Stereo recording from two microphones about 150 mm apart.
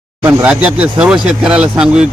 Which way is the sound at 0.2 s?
10° right (ahead or behind).